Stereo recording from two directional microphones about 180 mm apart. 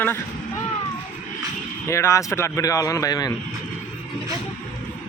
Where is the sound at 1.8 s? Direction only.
15° left (ahead or behind).